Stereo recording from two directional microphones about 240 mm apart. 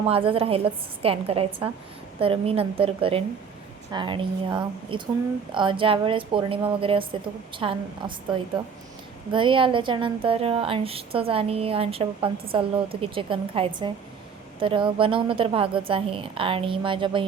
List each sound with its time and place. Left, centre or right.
0.0 s a woman's voice: right